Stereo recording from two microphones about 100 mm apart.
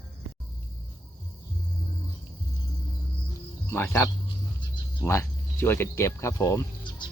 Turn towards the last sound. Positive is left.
turn(degrees=30)  # may be behind; listen again after turning